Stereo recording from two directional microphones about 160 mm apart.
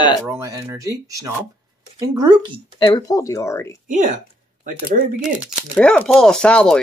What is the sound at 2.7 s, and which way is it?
Speech, 25° left (ahead or behind).